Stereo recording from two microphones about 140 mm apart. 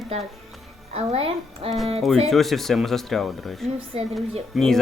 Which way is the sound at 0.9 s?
45° right (ahead or behind).